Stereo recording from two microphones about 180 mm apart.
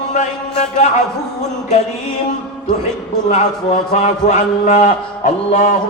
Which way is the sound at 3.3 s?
35° left (ahead or behind).